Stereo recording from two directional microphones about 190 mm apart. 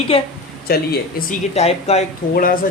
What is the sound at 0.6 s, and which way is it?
Speech, 55° left (ahead or behind).